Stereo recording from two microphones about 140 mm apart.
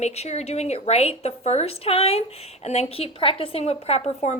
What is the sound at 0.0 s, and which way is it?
A woman's voice, 50° left (ahead or behind).